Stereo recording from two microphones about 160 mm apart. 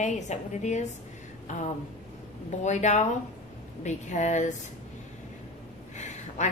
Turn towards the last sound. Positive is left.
turn(degrees=45)  # may be behind; listen again after turning